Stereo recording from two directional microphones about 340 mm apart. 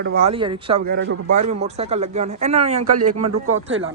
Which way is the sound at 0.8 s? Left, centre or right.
Right.